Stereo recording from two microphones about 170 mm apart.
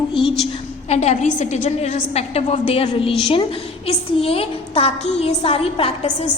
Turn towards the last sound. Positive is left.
turn(degrees=35)  # may be behind; listen again after turning